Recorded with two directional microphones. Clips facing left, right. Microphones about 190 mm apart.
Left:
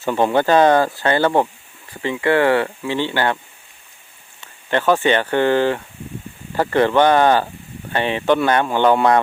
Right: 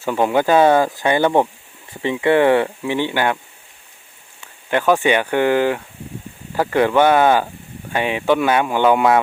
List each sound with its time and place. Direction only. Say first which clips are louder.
0.0 s speech: even; 5° right (ahead or behind)
4.4 s speech: even; 10° right (ahead or behind)